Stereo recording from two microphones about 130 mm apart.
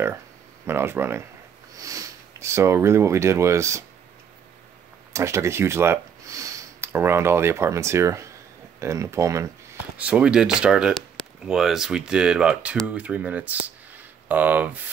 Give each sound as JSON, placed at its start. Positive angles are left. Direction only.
{"t": 0.7, "sound": "speech", "side_deg": -20}
{"t": 5.1, "sound": "speech", "side_deg": -20}
{"t": 9.9, "sound": "speech", "side_deg": -10}